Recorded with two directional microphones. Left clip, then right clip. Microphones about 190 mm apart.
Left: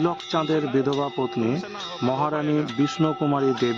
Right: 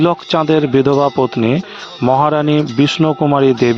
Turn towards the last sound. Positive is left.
turn(degrees=-45)  # may be behind; listen again after turning